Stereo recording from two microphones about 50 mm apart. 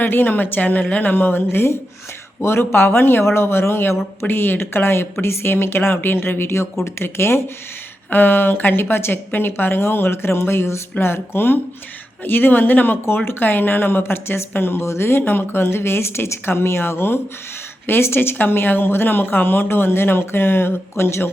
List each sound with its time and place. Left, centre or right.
0.0 s speech: left
1.1 s speech: left
8.1 s speech: left
14.8 s speech: left